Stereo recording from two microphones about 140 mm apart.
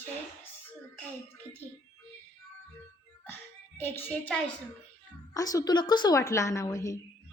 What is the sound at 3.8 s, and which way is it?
Speech, 15° left (ahead or behind).